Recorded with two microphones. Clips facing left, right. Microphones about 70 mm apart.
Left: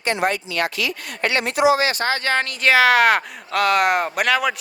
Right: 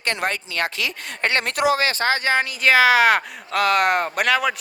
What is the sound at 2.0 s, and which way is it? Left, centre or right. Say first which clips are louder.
Speech: right 1 dB; right.